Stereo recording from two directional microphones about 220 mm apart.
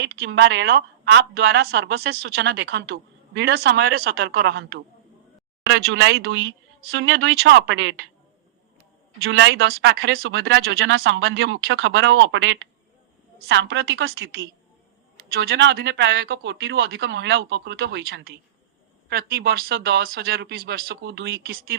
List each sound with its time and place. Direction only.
0.0 s speech: 50° right (ahead or behind)
9.2 s speech: 60° right (ahead or behind)
9.6 s speech: 45° right (ahead or behind)
10.2 s speech: 60° right (ahead or behind)